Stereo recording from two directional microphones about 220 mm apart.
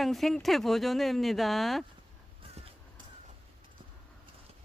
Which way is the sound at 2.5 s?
25° right (ahead or behind).